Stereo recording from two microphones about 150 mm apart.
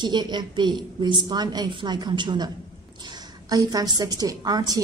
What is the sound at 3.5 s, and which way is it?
A woman's voice, 25° right (ahead or behind).